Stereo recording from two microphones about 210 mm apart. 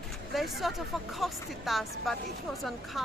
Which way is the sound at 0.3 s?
Centre (ahead or behind).